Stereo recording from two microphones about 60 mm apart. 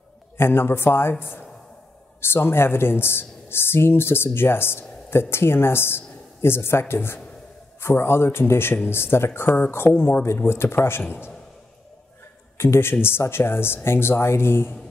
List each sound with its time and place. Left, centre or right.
0.4 s speech: left
2.3 s speech: left
12.5 s a man's voice: left